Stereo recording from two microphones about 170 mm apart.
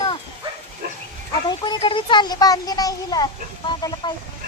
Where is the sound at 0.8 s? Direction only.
60° right (ahead or behind).